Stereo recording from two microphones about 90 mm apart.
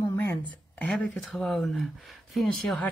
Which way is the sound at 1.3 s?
5° left (ahead or behind).